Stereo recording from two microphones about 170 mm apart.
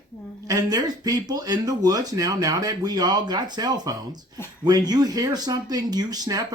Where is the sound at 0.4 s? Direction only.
20° right (ahead or behind).